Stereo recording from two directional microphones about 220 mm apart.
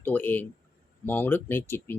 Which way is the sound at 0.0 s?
10° left (ahead or behind).